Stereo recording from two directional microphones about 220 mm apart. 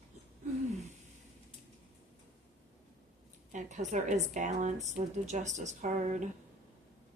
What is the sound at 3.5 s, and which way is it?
Speech, 35° right (ahead or behind).